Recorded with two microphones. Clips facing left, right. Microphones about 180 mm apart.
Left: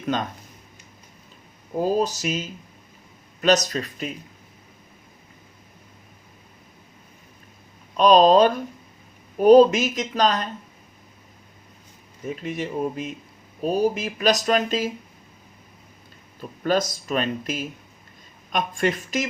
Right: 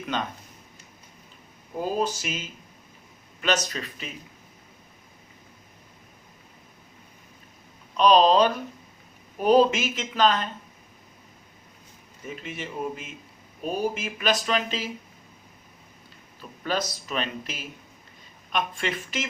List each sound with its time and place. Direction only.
0.0 s speech: 40° left (ahead or behind)
1.8 s speech: 40° left (ahead or behind)
7.9 s speech: 45° left (ahead or behind)
12.4 s speech: 40° left (ahead or behind)
16.4 s speech: 45° left (ahead or behind)